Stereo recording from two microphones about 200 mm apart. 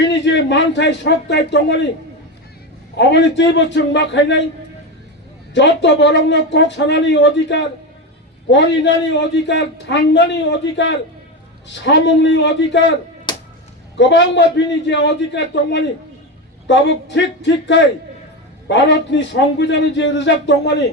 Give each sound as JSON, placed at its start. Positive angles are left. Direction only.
{"t": 0.0, "sound": "a man's voice", "side_deg": 60}
{"t": 3.0, "sound": "a man's voice", "side_deg": 60}
{"t": 5.5, "sound": "a man's voice", "side_deg": 65}
{"t": 13.3, "sound": "music", "side_deg": 20}
{"t": 13.9, "sound": "a man's voice", "side_deg": 65}